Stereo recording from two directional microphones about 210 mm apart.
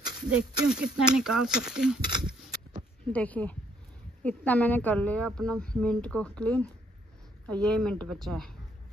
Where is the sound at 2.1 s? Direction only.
20° right (ahead or behind).